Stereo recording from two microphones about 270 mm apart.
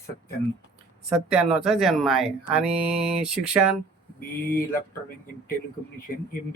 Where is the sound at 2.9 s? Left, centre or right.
Right.